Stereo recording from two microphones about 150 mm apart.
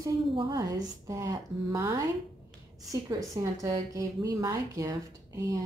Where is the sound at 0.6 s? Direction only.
25° right (ahead or behind).